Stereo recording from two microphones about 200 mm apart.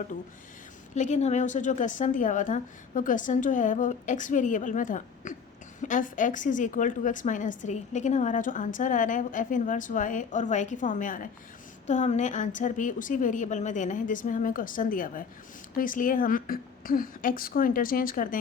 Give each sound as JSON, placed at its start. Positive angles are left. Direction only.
{"t": 0.9, "sound": "a woman's voice", "side_deg": 35}